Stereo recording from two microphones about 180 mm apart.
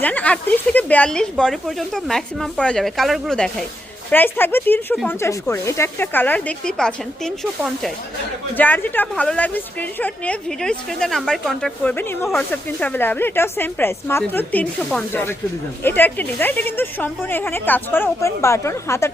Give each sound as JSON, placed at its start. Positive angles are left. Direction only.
{"t": 0.0, "sound": "a woman's voice", "side_deg": 10}